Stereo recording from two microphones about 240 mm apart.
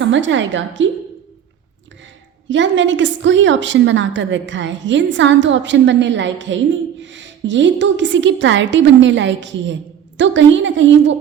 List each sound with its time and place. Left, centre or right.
0.0 s a woman's voice: right
2.5 s a woman's voice: right